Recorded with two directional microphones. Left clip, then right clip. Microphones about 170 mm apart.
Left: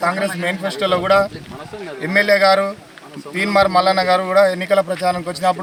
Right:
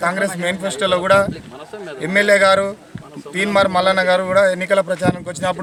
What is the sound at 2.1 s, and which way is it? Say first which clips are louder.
A man's voice: even; 10° right (ahead or behind).